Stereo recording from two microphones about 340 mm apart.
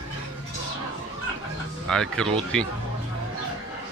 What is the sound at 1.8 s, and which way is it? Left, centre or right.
Speech, centre.